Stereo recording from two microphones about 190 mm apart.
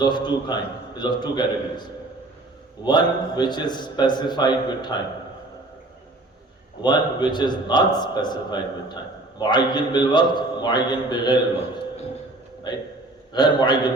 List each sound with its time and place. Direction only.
0.0 s a man's voice: 25° left (ahead or behind)
2.8 s a man's voice: 25° left (ahead or behind)
6.8 s a man's voice: 25° left (ahead or behind)